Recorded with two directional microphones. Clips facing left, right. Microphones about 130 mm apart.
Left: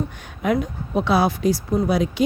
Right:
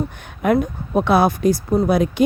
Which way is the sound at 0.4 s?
55° right (ahead or behind).